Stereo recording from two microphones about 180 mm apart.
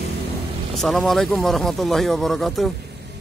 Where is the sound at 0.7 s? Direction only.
Centre (ahead or behind).